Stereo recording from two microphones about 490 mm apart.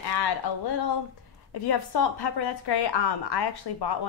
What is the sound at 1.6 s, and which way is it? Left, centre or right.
A woman's voice, left.